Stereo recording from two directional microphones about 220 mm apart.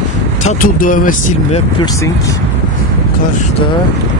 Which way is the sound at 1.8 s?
15° left (ahead or behind).